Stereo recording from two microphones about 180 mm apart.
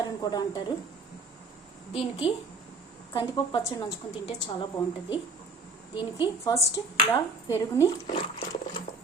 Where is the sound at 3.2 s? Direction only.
25° left (ahead or behind).